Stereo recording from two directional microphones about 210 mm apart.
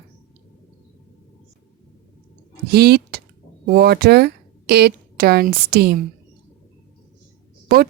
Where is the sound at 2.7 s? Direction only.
50° right (ahead or behind).